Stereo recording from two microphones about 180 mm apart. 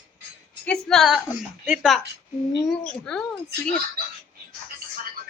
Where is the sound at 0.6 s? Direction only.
5° left (ahead or behind).